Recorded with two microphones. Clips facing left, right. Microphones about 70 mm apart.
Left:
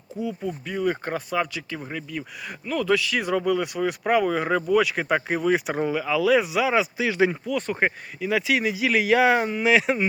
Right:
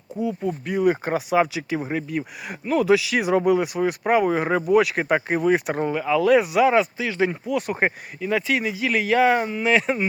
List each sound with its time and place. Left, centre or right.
0.2 s speech: centre; by 2.0 s right
2.7 s speech: centre
4.5 s speech: right
4.8 s speech: centre
6.9 s speech: centre
7.2 s speech: centre
7.7 s speech: right
8.2 s speech: centre